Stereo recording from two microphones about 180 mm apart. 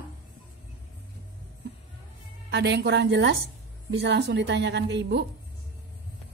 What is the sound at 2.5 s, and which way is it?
Speech, 70° right (ahead or behind).